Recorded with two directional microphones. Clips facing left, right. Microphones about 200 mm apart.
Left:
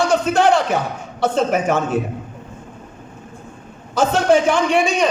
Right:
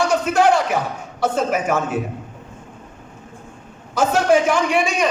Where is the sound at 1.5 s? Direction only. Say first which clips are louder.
Left 2 dB; 5° right (ahead or behind).